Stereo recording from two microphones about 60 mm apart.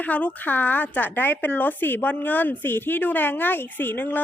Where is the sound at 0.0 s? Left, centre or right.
Left.